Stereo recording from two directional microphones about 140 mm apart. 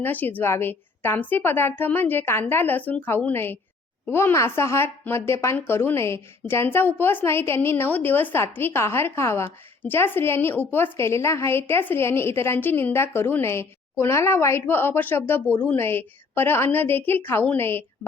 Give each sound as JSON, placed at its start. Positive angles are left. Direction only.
{"t": 0.0, "sound": "speech", "side_deg": 15}